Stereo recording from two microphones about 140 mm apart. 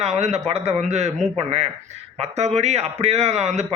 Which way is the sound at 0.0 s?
50° right (ahead or behind).